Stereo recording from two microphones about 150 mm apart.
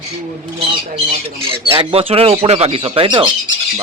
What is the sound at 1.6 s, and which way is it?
Speech, 35° right (ahead or behind).